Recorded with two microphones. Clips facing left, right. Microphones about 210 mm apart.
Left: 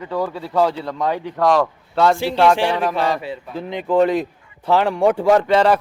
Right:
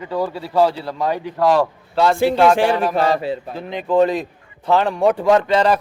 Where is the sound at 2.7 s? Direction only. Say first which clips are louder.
Right 2 dB; 5° right (ahead or behind).